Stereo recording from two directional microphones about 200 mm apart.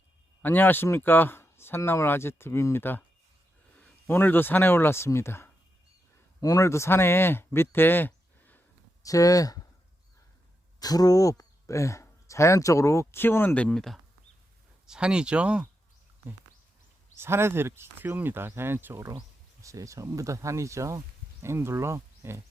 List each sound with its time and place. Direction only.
0.4 s speech: 10° left (ahead or behind)
10.8 s speech: 20° left (ahead or behind); by 15.6 s 5° right (ahead or behind)
17.2 s speech: 10° right (ahead or behind)